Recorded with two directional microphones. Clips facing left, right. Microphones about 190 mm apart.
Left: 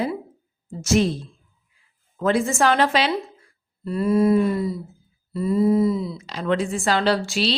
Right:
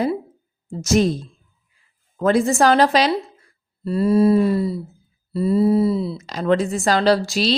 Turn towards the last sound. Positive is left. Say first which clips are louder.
# right 4 dB
turn(degrees=-40)  # may be behind; listen again after turning